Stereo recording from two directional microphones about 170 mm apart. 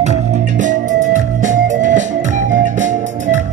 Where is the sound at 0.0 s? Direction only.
45° right (ahead or behind).